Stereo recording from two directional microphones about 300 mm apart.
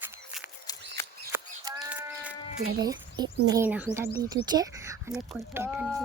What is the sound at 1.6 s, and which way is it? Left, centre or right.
Sheep, centre.